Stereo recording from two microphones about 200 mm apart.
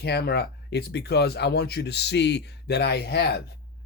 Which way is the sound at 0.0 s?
55° left (ahead or behind).